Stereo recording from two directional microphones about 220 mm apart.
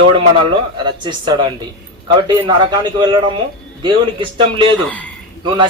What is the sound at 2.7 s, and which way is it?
Speech, 20° right (ahead or behind).